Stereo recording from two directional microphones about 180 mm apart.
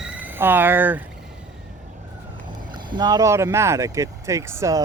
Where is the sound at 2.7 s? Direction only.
25° right (ahead or behind).